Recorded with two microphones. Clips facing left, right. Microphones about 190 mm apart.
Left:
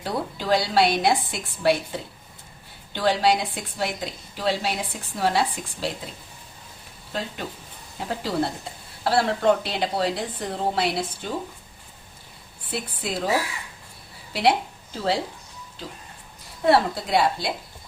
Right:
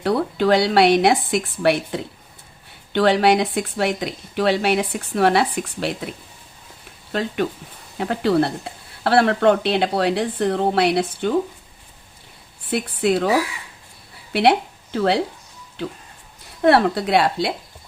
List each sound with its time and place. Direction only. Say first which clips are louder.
0.0 s a woman's voice: right 9 dB; 65° right (ahead or behind)
12.7 s speech: right 10 dB; 65° right (ahead or behind)
14.9 s speech: right 6 dB; 65° right (ahead or behind)